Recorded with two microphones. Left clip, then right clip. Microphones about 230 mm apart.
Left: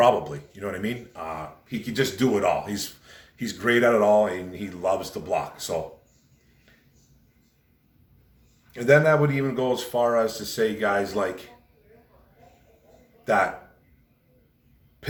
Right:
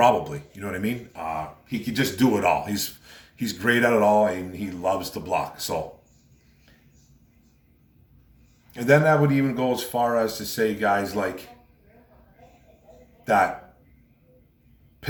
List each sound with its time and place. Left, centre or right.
0.0 s speech: centre
8.7 s speech: centre
13.2 s speech: centre